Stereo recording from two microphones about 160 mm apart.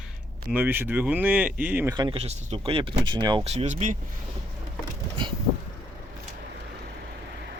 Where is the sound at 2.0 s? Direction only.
35° right (ahead or behind).